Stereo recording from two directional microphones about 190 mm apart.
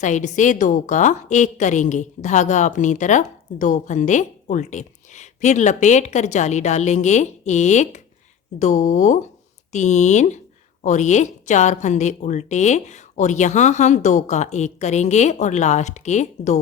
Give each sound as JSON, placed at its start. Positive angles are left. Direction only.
{"t": 0.0, "sound": "a woman's voice", "side_deg": 40}